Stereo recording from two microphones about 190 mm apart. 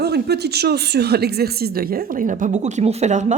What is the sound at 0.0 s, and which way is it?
Speech, 60° right (ahead or behind).